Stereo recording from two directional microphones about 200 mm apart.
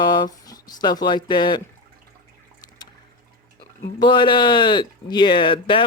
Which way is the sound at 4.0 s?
25° left (ahead or behind).